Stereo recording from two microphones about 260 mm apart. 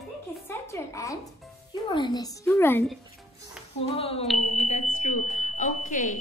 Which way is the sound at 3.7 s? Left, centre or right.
Left.